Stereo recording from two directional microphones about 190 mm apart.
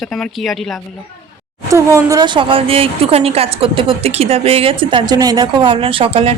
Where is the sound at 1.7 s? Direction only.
15° right (ahead or behind).